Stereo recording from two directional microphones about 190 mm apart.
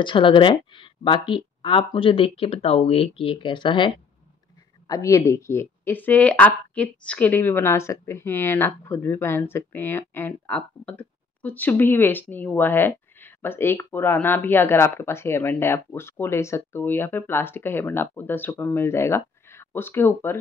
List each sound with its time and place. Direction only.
0.0 s speech: 25° left (ahead or behind)